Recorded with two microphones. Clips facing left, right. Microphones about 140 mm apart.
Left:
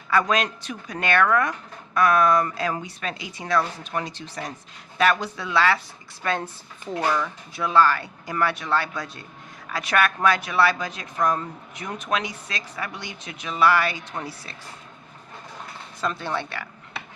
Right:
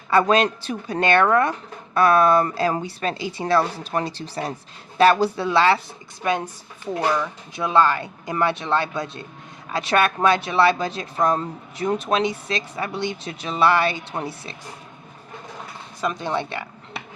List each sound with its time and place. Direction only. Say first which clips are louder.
0.1 s speech: right 5 dB; 30° right (ahead or behind)
6.2 s speech: right 3 dB; 15° right (ahead or behind)
16.0 s speech: right 3 dB; 15° right (ahead or behind)